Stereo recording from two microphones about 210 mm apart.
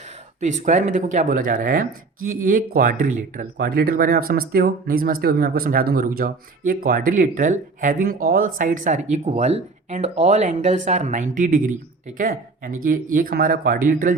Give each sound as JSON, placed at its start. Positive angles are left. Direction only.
{"t": 0.3, "sound": "speech", "side_deg": -35}